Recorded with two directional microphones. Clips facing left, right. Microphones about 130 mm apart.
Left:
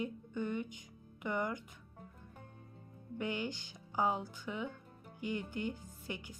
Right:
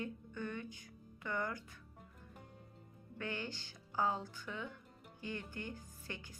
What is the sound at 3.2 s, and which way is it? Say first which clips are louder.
A woman's voice: left 5 dB; 15° left (ahead or behind).